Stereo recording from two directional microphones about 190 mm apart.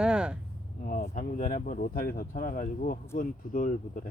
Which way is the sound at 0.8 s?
50° left (ahead or behind).